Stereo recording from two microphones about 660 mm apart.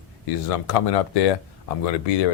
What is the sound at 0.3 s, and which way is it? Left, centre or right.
Speech, left.